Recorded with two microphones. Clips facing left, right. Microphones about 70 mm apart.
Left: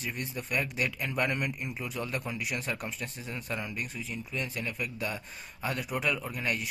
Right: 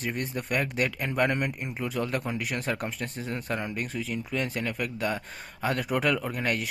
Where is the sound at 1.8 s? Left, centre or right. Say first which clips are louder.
Right 8 dB; right.